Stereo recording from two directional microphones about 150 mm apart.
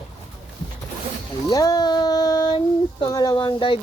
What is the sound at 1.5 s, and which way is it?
Speech, 25° left (ahead or behind).